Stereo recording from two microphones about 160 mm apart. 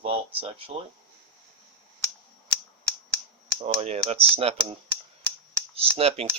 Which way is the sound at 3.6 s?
40° right (ahead or behind).